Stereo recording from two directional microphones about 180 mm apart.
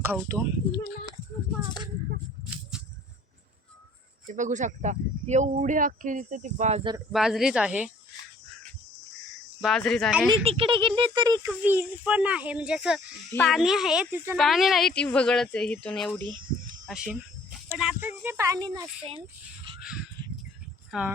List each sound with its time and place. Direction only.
0.1 s speech: 15° right (ahead or behind)
2.5 s a sound: 5° right (ahead or behind)
4.3 s speech: 45° right (ahead or behind)
7.1 s speech: centre (ahead or behind)
9.6 s speech: centre (ahead or behind)
10.2 s speech: 30° right (ahead or behind)
11.6 s speech: 10° right (ahead or behind); by 16.2 s 5° left (ahead or behind)
16.8 s speech: 5° right (ahead or behind); by 18.9 s 20° right (ahead or behind)
19.8 s crow: 5° right (ahead or behind)
20.9 s speech: 5° right (ahead or behind)